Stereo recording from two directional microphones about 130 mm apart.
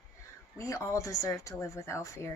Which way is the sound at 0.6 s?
25° left (ahead or behind).